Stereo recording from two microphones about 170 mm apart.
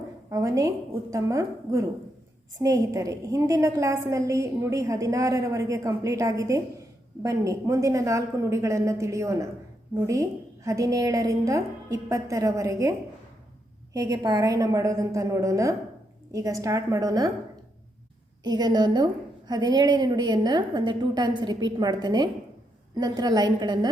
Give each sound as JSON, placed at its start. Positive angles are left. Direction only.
{"t": 0.3, "sound": "a woman's voice", "side_deg": -20}
{"t": 18.4, "sound": "a woman's voice", "side_deg": -25}